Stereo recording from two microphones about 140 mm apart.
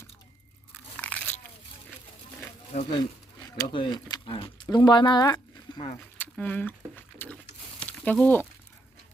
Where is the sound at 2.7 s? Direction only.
50° left (ahead or behind).